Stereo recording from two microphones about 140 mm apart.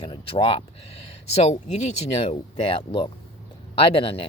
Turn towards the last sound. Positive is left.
turn(degrees=40)  # may be behind; listen again after turning